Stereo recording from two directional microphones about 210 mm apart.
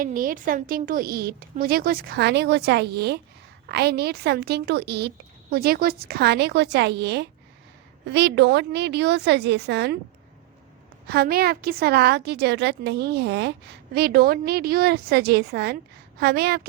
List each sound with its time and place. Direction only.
0.0 s a woman's voice: 40° right (ahead or behind)
11.0 s a woman's voice: 50° right (ahead or behind)